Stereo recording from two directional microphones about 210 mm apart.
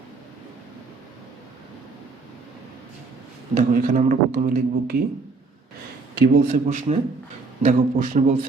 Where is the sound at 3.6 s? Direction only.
40° right (ahead or behind).